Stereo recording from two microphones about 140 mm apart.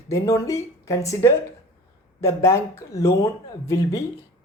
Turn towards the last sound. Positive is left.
turn(degrees=20)  # may be behind; listen again after turning